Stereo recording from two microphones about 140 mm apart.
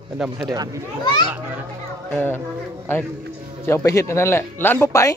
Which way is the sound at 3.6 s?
20° left (ahead or behind).